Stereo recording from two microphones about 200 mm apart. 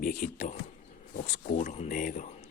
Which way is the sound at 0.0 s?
40° left (ahead or behind).